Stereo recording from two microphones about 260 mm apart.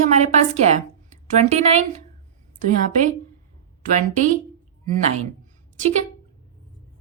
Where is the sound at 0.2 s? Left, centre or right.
Right.